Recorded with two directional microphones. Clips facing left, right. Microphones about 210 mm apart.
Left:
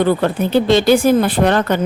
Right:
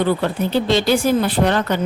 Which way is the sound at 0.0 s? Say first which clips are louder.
Left 3 dB; 50° left (ahead or behind).